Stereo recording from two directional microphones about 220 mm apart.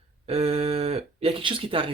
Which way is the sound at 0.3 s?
25° right (ahead or behind).